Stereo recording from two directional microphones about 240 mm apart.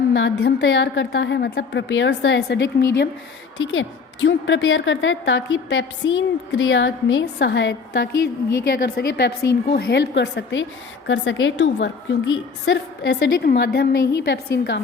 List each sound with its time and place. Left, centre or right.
0.1 s a woman's voice: left